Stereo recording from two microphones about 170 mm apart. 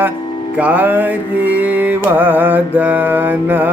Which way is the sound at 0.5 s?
10° right (ahead or behind).